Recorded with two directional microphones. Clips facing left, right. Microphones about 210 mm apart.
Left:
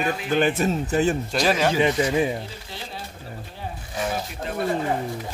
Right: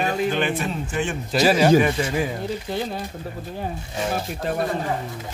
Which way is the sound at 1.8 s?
20° left (ahead or behind).